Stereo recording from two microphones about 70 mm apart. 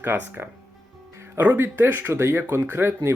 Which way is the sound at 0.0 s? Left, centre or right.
Right.